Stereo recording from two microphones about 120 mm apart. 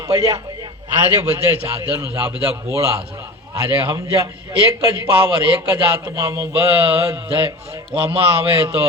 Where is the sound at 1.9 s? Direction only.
20° right (ahead or behind).